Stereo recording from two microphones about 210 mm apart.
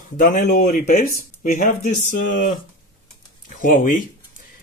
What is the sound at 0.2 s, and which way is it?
Speech, 40° left (ahead or behind).